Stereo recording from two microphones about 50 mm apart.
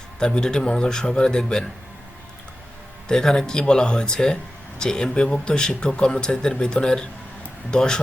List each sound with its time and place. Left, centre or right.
0.2 s speech: centre
3.1 s speech: centre